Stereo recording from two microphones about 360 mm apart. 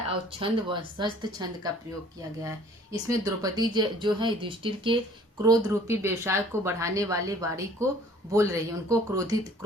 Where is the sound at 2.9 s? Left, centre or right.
Centre.